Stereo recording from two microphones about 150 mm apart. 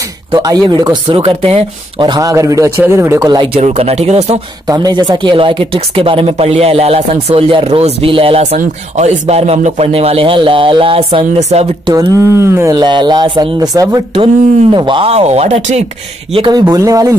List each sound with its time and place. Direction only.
0.3 s speech: 25° right (ahead or behind)
3.5 s speech: 45° right (ahead or behind)
4.6 s speech: 25° right (ahead or behind)
11.8 s speech: 25° right (ahead or behind); by 15.8 s 45° right (ahead or behind)
16.3 s speech: 30° right (ahead or behind)